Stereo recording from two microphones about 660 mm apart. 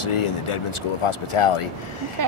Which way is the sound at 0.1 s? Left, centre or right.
Left.